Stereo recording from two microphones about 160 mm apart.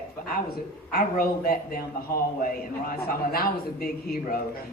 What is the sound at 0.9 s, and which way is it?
A man's voice, 65° left (ahead or behind).